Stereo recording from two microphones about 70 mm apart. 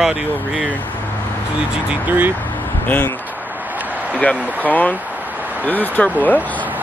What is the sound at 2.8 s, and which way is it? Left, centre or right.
Speech, left.